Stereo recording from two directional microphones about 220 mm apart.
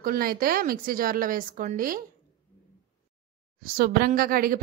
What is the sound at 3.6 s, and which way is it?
A woman's voice, 40° right (ahead or behind).